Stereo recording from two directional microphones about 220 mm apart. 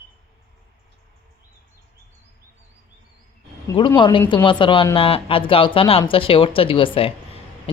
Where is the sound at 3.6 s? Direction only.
20° left (ahead or behind).